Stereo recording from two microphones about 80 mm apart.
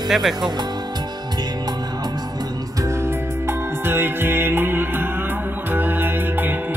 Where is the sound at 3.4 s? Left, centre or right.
Right.